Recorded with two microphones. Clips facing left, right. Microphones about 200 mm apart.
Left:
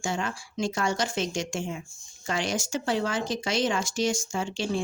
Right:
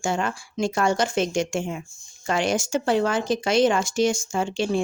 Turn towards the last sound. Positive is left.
turn(degrees=-60)  # may be behind; listen again after turning